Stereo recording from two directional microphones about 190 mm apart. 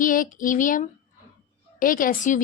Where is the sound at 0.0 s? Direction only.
45° left (ahead or behind).